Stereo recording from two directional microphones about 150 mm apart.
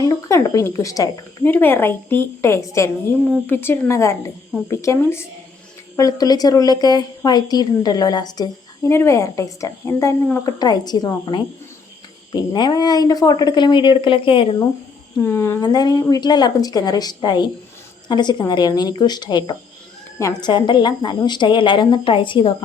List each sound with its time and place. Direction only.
0.0 s a woman's voice: 20° left (ahead or behind)
12.3 s a woman's voice: 30° left (ahead or behind)
15.2 s a woman's voice: 15° left (ahead or behind)
20.5 s a woman's voice: 30° left (ahead or behind)